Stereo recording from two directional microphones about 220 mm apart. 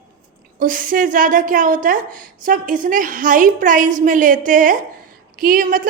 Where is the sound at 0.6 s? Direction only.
40° right (ahead or behind).